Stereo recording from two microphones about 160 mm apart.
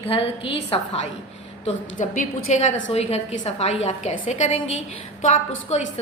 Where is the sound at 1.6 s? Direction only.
50° left (ahead or behind).